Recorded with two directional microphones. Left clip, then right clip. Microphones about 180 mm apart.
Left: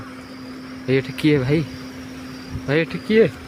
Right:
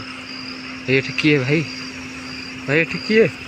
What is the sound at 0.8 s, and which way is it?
Speech, 5° left (ahead or behind).